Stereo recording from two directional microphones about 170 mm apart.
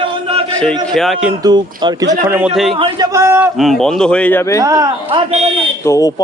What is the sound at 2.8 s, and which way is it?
Speech, 25° right (ahead or behind).